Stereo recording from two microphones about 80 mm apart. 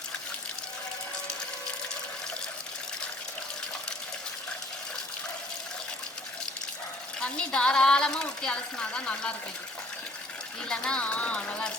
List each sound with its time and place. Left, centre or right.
7.2 s speech: centre
10.7 s speech: centre